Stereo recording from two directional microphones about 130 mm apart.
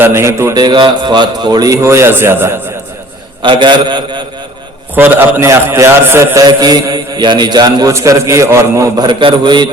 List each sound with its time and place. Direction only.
0.0 s a man's voice: 20° right (ahead or behind)
0.5 s a man's voice: 35° right (ahead or behind); by 2.6 s 20° right (ahead or behind)
3.4 s a man's voice: 40° right (ahead or behind)
4.9 s a man's voice: 15° right (ahead or behind)
6.4 s a man's voice: 30° right (ahead or behind)
9.0 s a man's voice: 35° right (ahead or behind)